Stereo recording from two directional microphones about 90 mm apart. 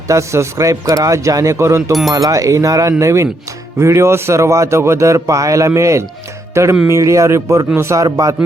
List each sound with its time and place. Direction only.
0.1 s a man's voice: 35° right (ahead or behind)
1.9 s speech: centre (ahead or behind)
2.1 s a man's voice: 40° right (ahead or behind)